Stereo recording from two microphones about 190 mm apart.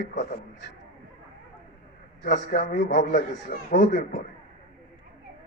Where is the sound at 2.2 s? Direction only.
60° left (ahead or behind).